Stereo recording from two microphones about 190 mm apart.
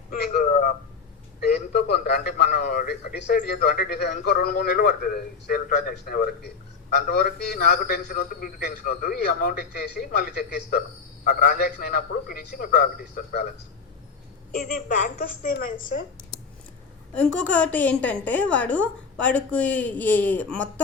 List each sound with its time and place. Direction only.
0.1 s a sound: 55° left (ahead or behind)
1.4 s a man's voice: 55° left (ahead or behind)
14.5 s a man's voice: 50° left (ahead or behind)
17.2 s a woman's voice: 5° left (ahead or behind)